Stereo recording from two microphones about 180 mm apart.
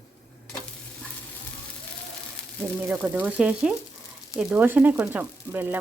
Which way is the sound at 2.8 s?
10° right (ahead or behind).